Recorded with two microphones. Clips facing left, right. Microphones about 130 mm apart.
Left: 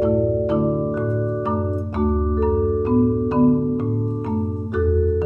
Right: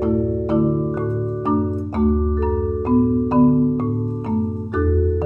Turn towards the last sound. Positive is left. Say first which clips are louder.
# right 2 dB
turn(degrees=-40)  # may be behind; listen again after turning